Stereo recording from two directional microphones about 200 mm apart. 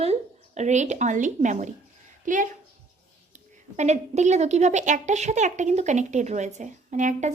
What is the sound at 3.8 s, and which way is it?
A woman's voice, 35° right (ahead or behind).